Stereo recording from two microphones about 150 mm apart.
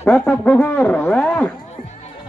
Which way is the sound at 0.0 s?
10° left (ahead or behind).